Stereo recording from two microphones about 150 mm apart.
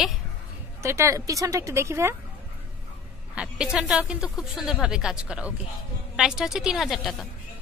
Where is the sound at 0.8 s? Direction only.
20° right (ahead or behind).